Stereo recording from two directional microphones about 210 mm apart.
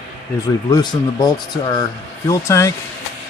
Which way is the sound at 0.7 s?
20° left (ahead or behind).